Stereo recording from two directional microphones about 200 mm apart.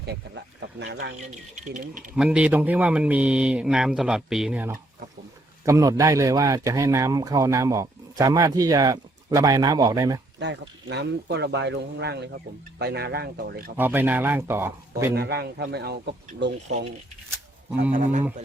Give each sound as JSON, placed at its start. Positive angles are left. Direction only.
{"t": 1.3, "sound": "speech", "side_deg": -35}
{"t": 2.1, "sound": "speech", "side_deg": -5}
{"t": 10.4, "sound": "a man's voice", "side_deg": -60}
{"t": 13.7, "sound": "speech", "side_deg": -10}
{"t": 15.1, "sound": "a man's voice", "side_deg": -55}
{"t": 17.9, "sound": "speech", "side_deg": -40}